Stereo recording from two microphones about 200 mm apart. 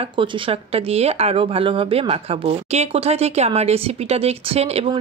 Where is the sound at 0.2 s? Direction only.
30° right (ahead or behind).